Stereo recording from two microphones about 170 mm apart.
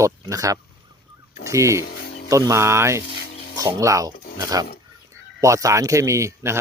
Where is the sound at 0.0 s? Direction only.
20° right (ahead or behind).